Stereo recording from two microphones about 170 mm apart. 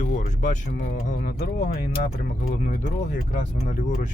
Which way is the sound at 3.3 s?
50° left (ahead or behind).